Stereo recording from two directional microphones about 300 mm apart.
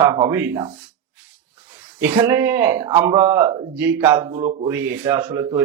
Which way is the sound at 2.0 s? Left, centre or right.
Centre.